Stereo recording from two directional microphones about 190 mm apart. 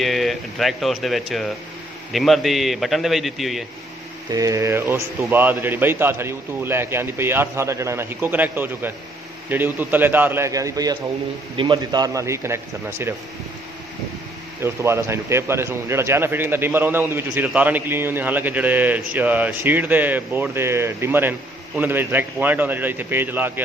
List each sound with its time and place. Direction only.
0.0 s speech: centre (ahead or behind)
4.3 s a man's voice: 15° right (ahead or behind)
14.6 s a man's voice: 15° right (ahead or behind)